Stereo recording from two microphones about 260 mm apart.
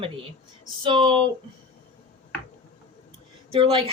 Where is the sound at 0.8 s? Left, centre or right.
Centre.